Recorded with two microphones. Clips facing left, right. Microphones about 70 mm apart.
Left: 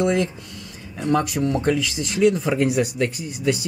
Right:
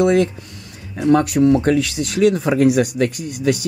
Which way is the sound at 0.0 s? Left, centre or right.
Right.